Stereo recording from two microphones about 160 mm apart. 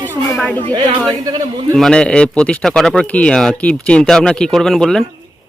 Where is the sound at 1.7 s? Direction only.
5° left (ahead or behind).